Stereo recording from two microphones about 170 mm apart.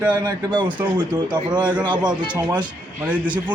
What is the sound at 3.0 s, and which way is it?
Speech, 10° right (ahead or behind).